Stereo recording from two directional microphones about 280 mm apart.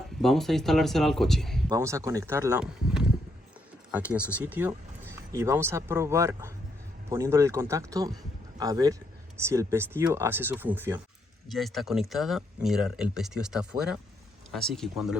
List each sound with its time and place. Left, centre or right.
0.2 s speech: centre
1.7 s speech: centre